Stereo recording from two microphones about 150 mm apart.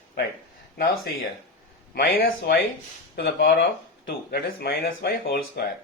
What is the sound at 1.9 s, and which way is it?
A man's voice, 80° left.